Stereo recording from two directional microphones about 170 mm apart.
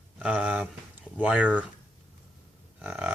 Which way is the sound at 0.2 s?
5° right (ahead or behind).